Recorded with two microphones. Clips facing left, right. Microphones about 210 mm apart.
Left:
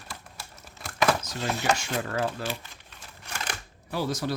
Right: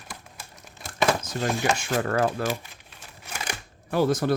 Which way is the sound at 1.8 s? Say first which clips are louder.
Right 5 dB; 55° right (ahead or behind).